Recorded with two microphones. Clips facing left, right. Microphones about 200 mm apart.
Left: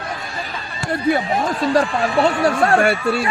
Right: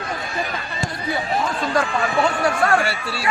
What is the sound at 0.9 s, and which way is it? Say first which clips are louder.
Speech: left 8 dB; 55° left (ahead or behind).